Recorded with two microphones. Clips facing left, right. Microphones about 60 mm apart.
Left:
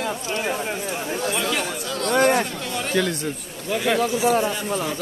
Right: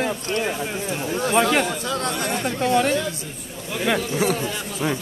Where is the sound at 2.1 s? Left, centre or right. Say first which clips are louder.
Left 13 dB; left.